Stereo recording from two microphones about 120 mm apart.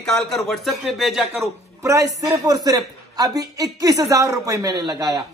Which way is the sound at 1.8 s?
25° right (ahead or behind).